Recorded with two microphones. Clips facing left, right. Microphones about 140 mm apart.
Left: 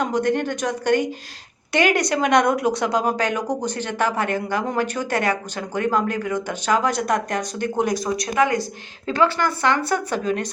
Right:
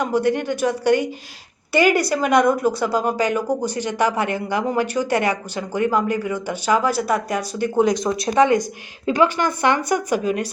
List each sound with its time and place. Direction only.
0.0 s speech: 10° right (ahead or behind)
7.9 s speech: 25° right (ahead or behind)